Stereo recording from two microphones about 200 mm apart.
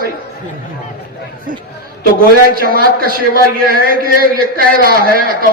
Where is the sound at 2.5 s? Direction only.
45° right (ahead or behind).